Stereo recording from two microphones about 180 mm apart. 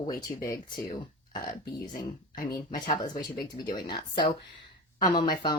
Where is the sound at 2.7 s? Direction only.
30° left (ahead or behind).